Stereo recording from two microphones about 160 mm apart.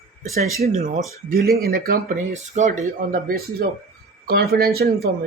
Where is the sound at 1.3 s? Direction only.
70° right (ahead or behind).